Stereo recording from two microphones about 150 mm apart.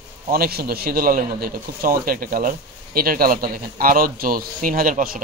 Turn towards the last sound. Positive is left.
turn(degrees=-70)  # may be behind; listen again after turning